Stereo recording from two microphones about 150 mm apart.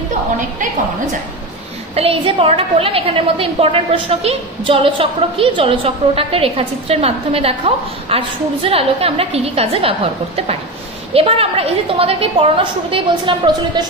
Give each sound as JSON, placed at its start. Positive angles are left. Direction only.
{"t": 2.0, "sound": "a woman's voice", "side_deg": -40}